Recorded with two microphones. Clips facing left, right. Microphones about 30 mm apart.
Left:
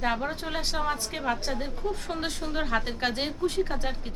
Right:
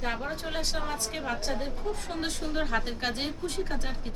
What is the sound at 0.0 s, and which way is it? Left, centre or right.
A woman's voice, centre.